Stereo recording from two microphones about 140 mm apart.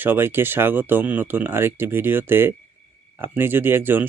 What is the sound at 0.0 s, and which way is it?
Speech, 15° right (ahead or behind).